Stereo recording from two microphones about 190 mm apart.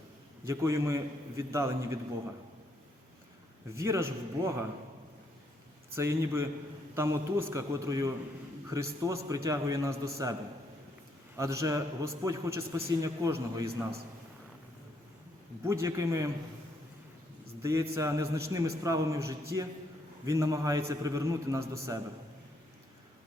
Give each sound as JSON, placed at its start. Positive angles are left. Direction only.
{"t": 0.4, "sound": "a man's voice", "side_deg": -15}
{"t": 3.7, "sound": "a man's voice", "side_deg": -15}
{"t": 5.9, "sound": "a man's voice", "side_deg": -15}
{"t": 11.3, "sound": "a man's voice", "side_deg": -15}
{"t": 15.6, "sound": "a man's voice", "side_deg": -15}
{"t": 17.6, "sound": "a man's voice", "side_deg": -15}